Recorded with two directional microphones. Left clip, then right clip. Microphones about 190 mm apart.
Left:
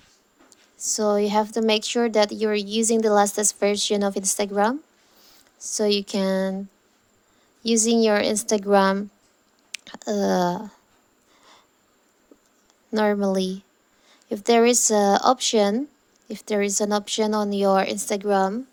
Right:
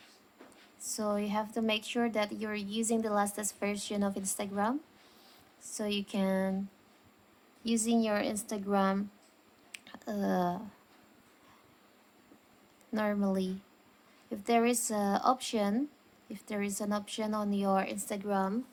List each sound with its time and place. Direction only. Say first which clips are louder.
0.8 s speech: left 13 dB; 35° left (ahead or behind)
7.6 s a woman's voice: left 12 dB; 40° left (ahead or behind)
9.7 s a sound: left 13 dB; 40° left (ahead or behind)
12.9 s speech: left 11 dB; 40° left (ahead or behind)